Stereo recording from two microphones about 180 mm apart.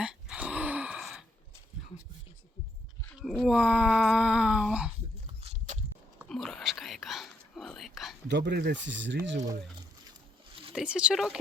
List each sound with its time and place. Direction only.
0.0 s gasp: 5° right (ahead or behind)
3.2 s a sound: centre (ahead or behind)
5.4 s biting: 35° right (ahead or behind)
6.2 s whispering: centre (ahead or behind)
8.3 s speech: 70° right (ahead or behind); by 9.5 s 90° right
10.8 s speech: 5° right (ahead or behind)